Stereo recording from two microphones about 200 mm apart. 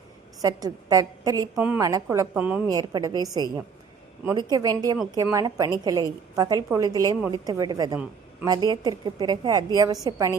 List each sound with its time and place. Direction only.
0.4 s a woman's voice: 20° right (ahead or behind)
1.5 s a woman's voice: 10° right (ahead or behind)
2.6 s a woman's voice: 20° right (ahead or behind)